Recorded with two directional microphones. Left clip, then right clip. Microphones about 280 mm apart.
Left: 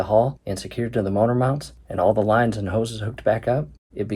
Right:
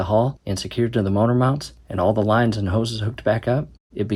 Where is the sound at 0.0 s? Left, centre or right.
Centre.